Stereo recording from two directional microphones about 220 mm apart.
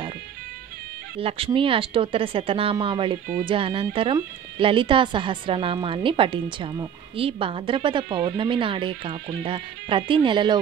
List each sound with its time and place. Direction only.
1.2 s speech: 25° right (ahead or behind)